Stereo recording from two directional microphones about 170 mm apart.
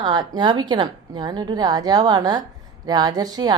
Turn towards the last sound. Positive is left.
turn(degrees=-25)  # may be behind; listen again after turning